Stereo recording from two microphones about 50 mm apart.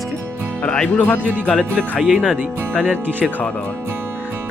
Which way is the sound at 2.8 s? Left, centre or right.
Right.